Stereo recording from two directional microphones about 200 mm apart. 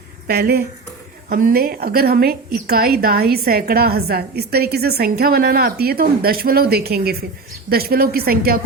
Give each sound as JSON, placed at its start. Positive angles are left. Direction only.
{"t": 0.3, "sound": "a woman's voice", "side_deg": -50}